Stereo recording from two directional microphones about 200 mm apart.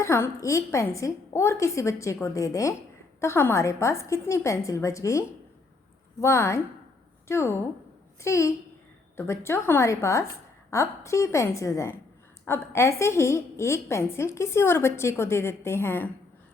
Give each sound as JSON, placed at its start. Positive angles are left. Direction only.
{"t": 0.0, "sound": "a woman's voice", "side_deg": 15}